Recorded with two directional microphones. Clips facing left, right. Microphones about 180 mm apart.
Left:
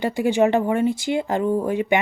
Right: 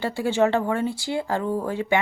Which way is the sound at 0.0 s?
15° left (ahead or behind).